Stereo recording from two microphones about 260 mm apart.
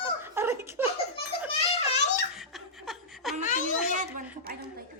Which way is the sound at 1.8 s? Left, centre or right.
Left.